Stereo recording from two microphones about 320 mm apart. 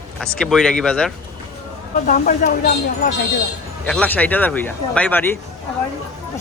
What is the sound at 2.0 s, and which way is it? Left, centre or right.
Speech, left.